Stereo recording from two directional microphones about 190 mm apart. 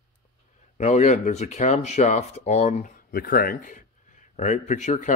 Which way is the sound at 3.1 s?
50° left (ahead or behind).